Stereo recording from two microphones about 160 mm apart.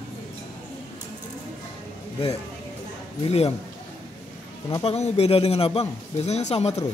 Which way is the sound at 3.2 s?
40° left (ahead or behind).